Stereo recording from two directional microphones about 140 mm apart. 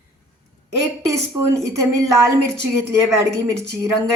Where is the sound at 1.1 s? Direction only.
20° right (ahead or behind).